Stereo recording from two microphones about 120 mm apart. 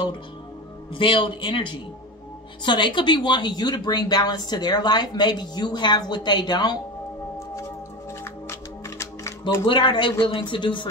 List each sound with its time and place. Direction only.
0.9 s speech: 45° left (ahead or behind)
8.2 s music: 20° left (ahead or behind)
9.7 s speech: 40° left (ahead or behind)